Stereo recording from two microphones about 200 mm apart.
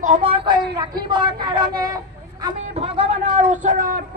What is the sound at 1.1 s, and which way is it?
Speech, 20° right (ahead or behind).